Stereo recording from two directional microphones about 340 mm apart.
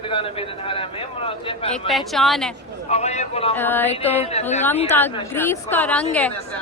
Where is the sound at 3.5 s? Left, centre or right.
Centre.